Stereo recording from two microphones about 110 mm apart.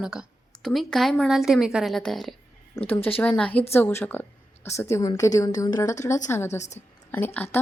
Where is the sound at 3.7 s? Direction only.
25° left (ahead or behind).